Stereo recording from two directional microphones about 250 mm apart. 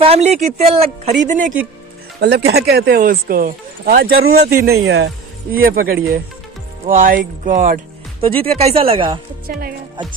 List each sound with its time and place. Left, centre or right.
0.0 s speech: right
8.6 s speech: right